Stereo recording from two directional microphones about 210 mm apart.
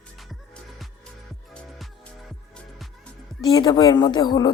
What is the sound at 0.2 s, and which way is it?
Music, centre (ahead or behind).